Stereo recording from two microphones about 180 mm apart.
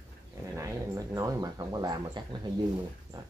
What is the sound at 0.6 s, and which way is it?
Speech, 20° right (ahead or behind).